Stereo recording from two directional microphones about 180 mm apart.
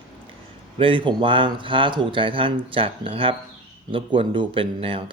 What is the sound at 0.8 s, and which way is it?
Speech, 30° right (ahead or behind).